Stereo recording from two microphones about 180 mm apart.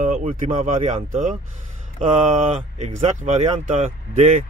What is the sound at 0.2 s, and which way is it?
Speech, 35° right (ahead or behind).